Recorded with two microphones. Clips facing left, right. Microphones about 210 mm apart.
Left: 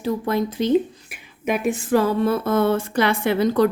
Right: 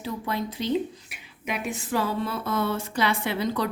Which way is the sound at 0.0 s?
50° left (ahead or behind).